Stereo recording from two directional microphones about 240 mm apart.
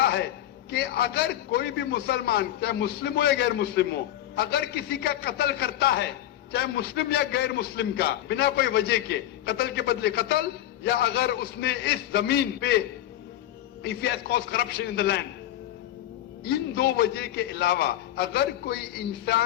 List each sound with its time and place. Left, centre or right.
0.0 s a sound: left
0.7 s a man's voice: left
13.8 s a man's voice: left
16.4 s a man's voice: left